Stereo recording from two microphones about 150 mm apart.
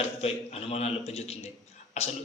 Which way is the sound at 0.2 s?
40° left (ahead or behind).